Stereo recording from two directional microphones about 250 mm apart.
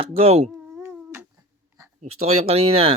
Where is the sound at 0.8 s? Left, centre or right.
Centre.